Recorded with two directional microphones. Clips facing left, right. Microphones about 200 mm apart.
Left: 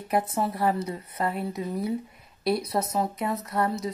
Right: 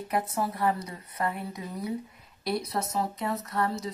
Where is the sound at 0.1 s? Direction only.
25° left (ahead or behind).